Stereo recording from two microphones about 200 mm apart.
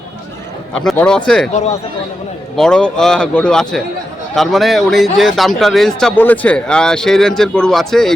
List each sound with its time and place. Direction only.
0.7 s speech: 5° left (ahead or behind)
1.5 s speech: 35° left (ahead or behind)
2.6 s speech: 5° left (ahead or behind)